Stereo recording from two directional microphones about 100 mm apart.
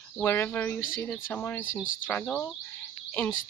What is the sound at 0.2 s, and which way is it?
Speech, 20° left (ahead or behind).